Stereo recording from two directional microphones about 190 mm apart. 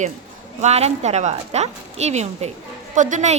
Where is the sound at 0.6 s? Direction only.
35° right (ahead or behind).